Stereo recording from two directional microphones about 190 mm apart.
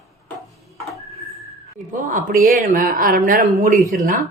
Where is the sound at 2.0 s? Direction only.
40° right (ahead or behind).